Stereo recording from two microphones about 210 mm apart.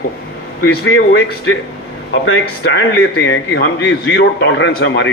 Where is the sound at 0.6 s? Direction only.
70° left (ahead or behind).